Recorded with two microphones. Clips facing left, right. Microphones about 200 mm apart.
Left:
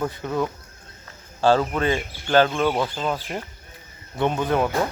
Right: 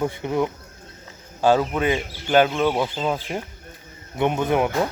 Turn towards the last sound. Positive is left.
turn(degrees=-15)  # may be behind; listen again after turning